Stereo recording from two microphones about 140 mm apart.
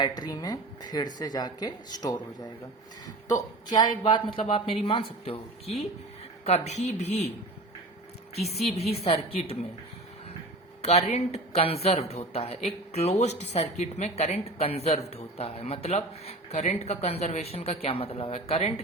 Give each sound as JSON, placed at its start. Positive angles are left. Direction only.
{"t": 0.0, "sound": "a woman's voice", "side_deg": 30}
{"t": 8.4, "sound": "speech", "side_deg": 50}
{"t": 11.1, "sound": "speech", "side_deg": 45}